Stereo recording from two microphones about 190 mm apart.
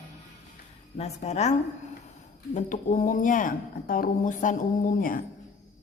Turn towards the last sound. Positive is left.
turn(degrees=45)  # may be behind; listen again after turning